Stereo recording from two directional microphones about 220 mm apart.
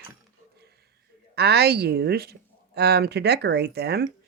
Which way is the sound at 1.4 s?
45° right (ahead or behind).